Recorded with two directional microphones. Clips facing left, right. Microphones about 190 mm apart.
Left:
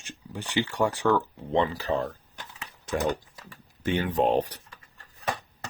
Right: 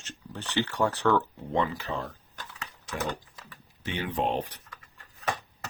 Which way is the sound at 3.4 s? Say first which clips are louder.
Left 2 dB; 45° left (ahead or behind).